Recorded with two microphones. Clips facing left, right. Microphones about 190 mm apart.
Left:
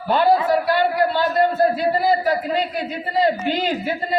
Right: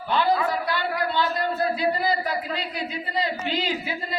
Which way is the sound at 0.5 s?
45° left (ahead or behind).